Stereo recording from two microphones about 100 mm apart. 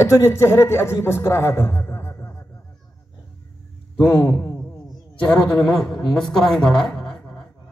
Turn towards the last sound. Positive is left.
turn(degrees=5)  # may be behind; listen again after turning